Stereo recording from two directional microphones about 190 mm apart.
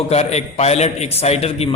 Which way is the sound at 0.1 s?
35° left (ahead or behind).